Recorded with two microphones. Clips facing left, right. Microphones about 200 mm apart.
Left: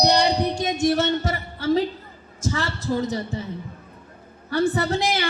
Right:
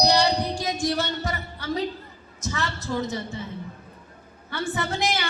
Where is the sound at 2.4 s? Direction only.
30° left (ahead or behind).